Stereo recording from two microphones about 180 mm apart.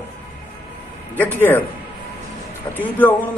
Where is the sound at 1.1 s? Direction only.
10° left (ahead or behind).